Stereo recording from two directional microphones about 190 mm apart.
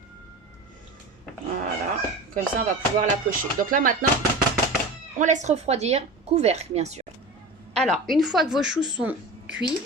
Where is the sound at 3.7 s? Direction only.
45° right (ahead or behind).